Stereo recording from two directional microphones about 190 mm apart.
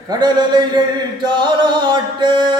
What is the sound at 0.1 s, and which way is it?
Chant, 20° right (ahead or behind).